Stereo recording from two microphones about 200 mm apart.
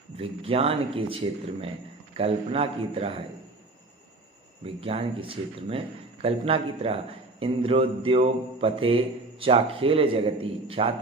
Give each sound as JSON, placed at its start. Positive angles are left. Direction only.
{"t": 0.2, "sound": "speech", "side_deg": -30}
{"t": 4.6, "sound": "speech", "side_deg": -30}